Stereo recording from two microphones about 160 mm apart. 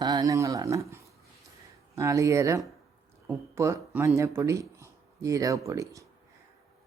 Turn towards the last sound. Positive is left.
turn(degrees=-20)  # may be behind; listen again after turning